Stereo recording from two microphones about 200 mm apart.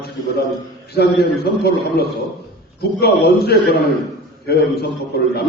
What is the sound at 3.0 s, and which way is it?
A man's voice, 50° left (ahead or behind).